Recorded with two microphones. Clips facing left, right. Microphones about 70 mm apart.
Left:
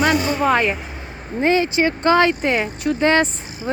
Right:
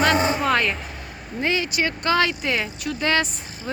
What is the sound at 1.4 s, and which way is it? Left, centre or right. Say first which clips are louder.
Speech: left 6 dB; left.